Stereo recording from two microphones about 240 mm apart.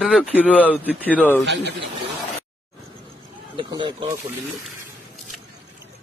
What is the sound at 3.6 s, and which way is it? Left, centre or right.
Speech, right.